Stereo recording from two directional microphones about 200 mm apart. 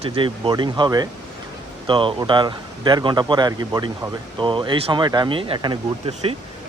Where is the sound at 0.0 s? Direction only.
25° right (ahead or behind).